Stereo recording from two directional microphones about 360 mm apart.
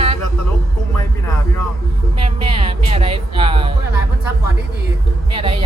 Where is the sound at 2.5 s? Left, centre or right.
Centre.